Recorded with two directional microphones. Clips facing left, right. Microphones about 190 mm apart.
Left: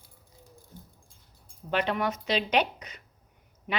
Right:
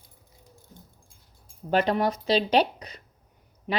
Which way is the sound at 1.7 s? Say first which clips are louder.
Right 5 dB; 40° right (ahead or behind).